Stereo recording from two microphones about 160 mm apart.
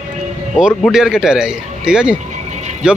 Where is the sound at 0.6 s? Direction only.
5° right (ahead or behind).